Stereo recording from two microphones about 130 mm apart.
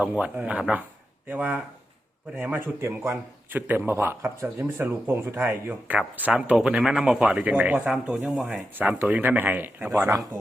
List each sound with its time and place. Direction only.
0.0 s a man's voice: 10° right (ahead or behind)
8.7 s a man's voice: 15° right (ahead or behind)